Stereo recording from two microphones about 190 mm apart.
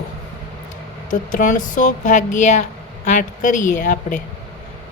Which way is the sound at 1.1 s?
40° left (ahead or behind).